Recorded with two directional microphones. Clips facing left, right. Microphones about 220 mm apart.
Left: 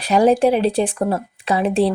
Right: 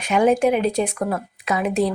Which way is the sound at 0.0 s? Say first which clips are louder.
Left 3 dB; 35° left (ahead or behind).